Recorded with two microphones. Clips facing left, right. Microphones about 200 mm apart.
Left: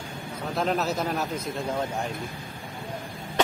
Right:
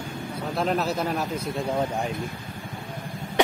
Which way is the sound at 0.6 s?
Centre (ahead or behind).